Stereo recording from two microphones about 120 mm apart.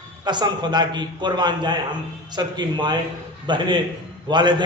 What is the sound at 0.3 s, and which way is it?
A man's voice, 40° right (ahead or behind).